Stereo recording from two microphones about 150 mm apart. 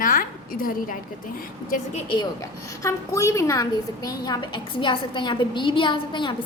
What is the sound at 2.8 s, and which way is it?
A woman's voice, 20° left (ahead or behind).